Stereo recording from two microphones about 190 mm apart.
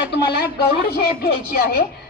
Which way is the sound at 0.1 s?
55° left (ahead or behind).